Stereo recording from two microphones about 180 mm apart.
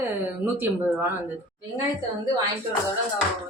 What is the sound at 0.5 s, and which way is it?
Speech, 10° right (ahead or behind).